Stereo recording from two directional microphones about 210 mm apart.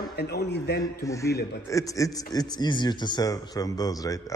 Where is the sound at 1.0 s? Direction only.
15° left (ahead or behind).